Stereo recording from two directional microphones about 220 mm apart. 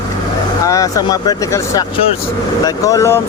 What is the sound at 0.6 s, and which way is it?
Speech, 15° left (ahead or behind).